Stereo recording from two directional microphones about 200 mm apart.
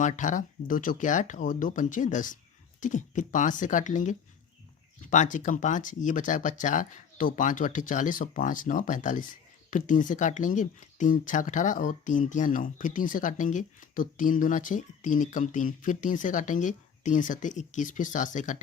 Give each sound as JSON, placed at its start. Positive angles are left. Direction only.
{"t": 0.0, "sound": "speech", "side_deg": 40}